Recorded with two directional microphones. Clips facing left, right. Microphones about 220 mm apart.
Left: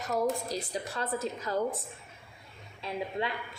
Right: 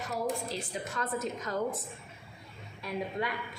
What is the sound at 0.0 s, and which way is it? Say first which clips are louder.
A woman's voice: left 3 dB; 40° left (ahead or behind).